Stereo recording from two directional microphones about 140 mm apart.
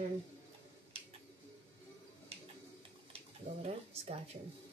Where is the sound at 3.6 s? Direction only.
45° right (ahead or behind).